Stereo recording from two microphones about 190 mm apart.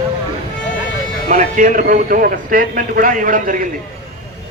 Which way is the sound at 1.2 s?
40° right (ahead or behind).